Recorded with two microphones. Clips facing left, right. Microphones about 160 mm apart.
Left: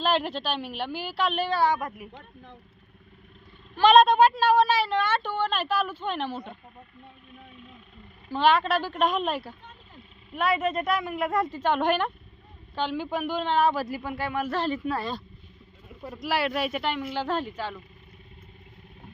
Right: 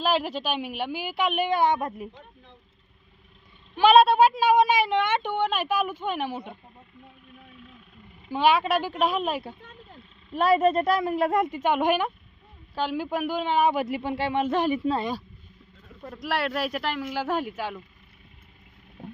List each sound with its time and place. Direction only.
0.0 s speech: 5° right (ahead or behind); by 2.0 s 25° right (ahead or behind)
3.8 s speech: 5° right (ahead or behind)
8.3 s speech: 10° right (ahead or behind)
10.3 s a woman's voice: 35° right (ahead or behind)
11.6 s speech: 10° right (ahead or behind)
15.9 s speech: 5° left (ahead or behind); by 17.8 s 10° right (ahead or behind)